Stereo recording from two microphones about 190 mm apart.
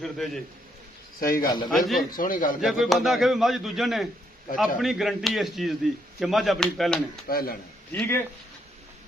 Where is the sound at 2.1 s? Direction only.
45° left (ahead or behind).